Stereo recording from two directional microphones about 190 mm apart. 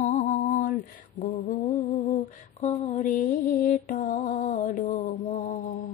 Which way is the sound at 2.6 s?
35° left (ahead or behind).